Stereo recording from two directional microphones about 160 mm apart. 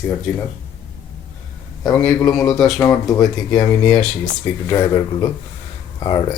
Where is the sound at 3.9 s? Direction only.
10° left (ahead or behind).